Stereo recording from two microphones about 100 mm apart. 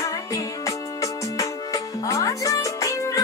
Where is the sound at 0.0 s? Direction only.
35° left (ahead or behind).